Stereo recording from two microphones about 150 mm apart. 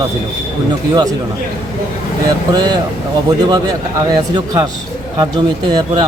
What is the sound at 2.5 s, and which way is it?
Speech, 30° right (ahead or behind).